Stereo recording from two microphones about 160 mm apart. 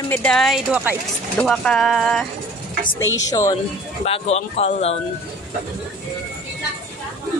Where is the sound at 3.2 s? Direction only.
20° left (ahead or behind).